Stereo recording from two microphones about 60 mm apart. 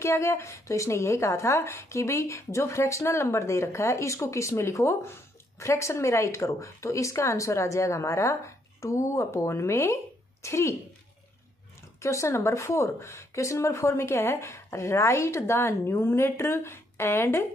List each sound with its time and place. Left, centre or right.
0.0 s speech: left
12.0 s speech: left